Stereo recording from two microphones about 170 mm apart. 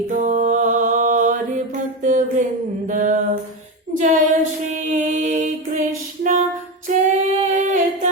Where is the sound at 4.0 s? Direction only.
50° right (ahead or behind).